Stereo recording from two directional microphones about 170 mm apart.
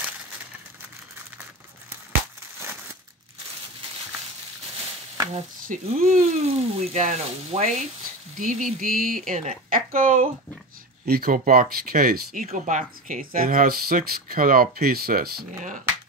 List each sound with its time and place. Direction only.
5.3 s speech: 45° right (ahead or behind)
12.4 s speech: 45° right (ahead or behind)